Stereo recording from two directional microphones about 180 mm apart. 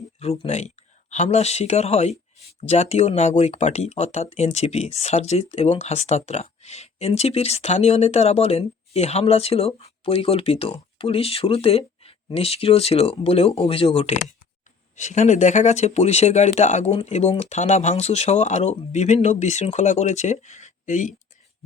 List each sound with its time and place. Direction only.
0.2 s speech: 35° left (ahead or behind)